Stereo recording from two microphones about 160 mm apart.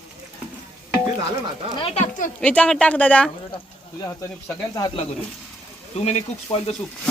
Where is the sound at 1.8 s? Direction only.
45° left (ahead or behind).